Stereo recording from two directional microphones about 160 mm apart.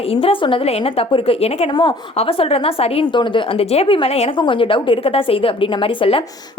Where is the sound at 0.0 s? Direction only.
35° left (ahead or behind).